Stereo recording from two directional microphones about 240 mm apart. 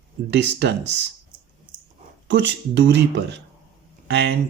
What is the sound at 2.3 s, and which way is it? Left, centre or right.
Speech, right.